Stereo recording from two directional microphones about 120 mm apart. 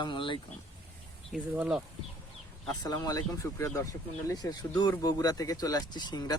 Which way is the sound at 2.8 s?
30° left (ahead or behind).